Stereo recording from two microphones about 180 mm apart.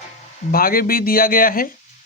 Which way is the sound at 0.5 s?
55° left (ahead or behind).